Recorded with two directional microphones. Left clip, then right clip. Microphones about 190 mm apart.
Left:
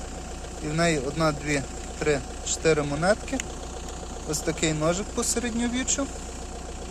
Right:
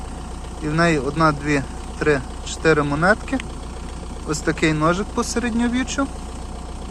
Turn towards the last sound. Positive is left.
turn(degrees=5)  # may be behind; listen again after turning